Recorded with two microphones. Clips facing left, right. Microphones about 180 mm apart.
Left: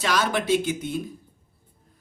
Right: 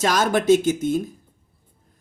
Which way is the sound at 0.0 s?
45° right (ahead or behind).